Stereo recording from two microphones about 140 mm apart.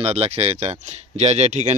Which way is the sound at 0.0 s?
45° right (ahead or behind).